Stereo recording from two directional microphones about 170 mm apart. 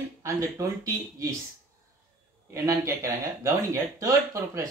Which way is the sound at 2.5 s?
15° right (ahead or behind).